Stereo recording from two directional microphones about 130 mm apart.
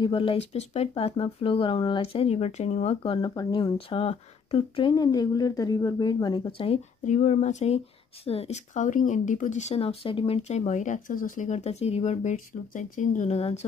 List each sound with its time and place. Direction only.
0.0 s speech: 45° left (ahead or behind)
3.2 s a woman's voice: 35° left (ahead or behind)
3.7 s speech: 50° left (ahead or behind)
4.9 s a woman's voice: 30° left (ahead or behind)
7.1 s speech: 70° left (ahead or behind); by 13.7 s 55° left (ahead or behind)